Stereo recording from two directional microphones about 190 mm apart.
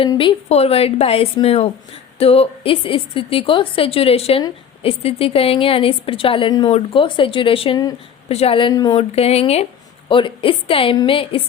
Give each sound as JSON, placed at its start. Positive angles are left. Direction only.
{"t": 0.0, "sound": "a woman's voice", "side_deg": 25}